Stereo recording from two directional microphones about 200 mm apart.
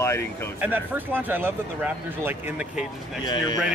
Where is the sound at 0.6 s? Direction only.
10° right (ahead or behind).